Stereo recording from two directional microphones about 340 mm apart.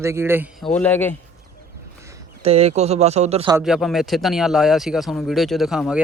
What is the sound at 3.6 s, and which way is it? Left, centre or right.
Speech, centre.